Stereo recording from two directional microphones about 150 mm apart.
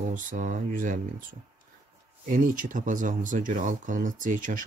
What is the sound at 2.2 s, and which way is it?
Speech, 60° right (ahead or behind).